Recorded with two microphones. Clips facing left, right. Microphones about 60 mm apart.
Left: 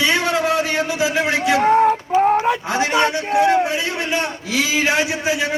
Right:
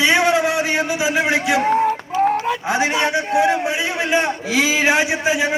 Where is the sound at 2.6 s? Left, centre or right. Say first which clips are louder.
Left 1 dB; right.